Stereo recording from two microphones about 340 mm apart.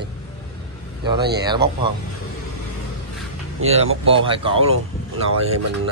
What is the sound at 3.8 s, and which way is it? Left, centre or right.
Speech, right.